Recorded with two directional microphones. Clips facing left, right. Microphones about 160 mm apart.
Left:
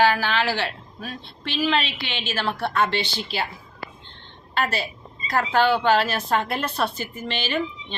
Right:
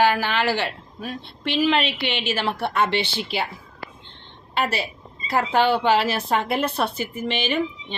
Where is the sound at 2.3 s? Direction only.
20° right (ahead or behind).